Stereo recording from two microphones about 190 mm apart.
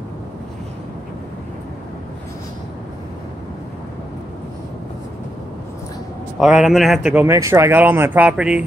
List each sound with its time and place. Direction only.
6.4 s speech: centre (ahead or behind)